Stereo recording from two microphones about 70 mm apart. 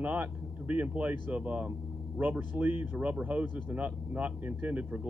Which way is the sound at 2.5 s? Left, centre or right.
Right.